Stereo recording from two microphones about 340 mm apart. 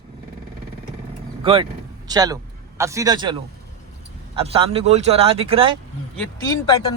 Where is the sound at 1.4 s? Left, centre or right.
Centre.